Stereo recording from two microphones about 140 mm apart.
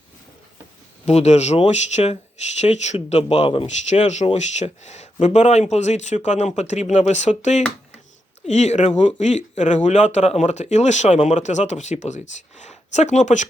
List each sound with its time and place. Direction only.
1.0 s speech: 50° left (ahead or behind)
3.8 s speech: 55° left (ahead or behind)